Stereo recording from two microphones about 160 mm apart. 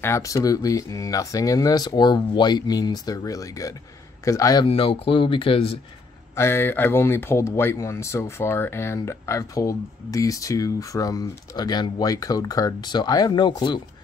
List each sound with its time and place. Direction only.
0.0 s speech: 20° left (ahead or behind)
4.6 s speech: 35° left (ahead or behind)
6.3 s speech: 15° left (ahead or behind)